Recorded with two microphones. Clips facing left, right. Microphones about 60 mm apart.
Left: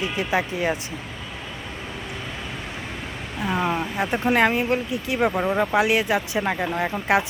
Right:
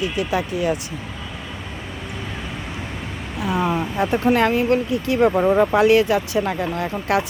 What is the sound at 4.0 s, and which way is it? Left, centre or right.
Speech, left.